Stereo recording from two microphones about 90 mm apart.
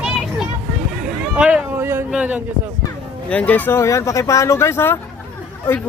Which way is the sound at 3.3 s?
15° left (ahead or behind).